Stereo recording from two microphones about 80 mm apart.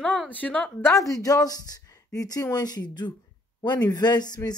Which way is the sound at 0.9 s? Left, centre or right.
Left.